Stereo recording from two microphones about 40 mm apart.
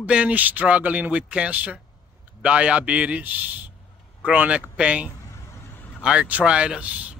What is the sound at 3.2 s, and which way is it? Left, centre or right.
Speech, right.